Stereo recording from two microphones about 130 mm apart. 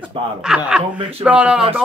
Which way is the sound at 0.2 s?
45° right (ahead or behind).